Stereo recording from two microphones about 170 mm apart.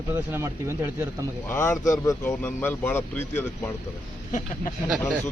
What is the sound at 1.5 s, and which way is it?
Speech, 15° left (ahead or behind).